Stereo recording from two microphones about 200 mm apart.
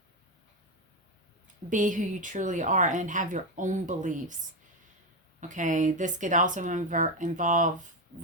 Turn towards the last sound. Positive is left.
turn(degrees=-40)  # may be behind; listen again after turning